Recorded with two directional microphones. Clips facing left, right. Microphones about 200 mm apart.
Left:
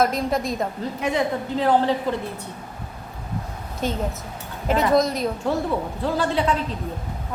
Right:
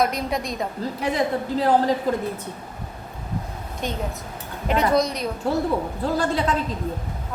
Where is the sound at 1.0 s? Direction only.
35° right (ahead or behind).